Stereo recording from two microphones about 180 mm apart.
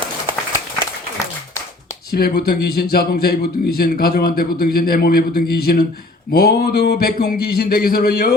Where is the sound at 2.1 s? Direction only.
60° left (ahead or behind).